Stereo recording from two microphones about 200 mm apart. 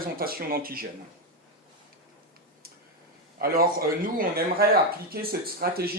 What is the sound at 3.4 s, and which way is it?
Speech, 45° right (ahead or behind).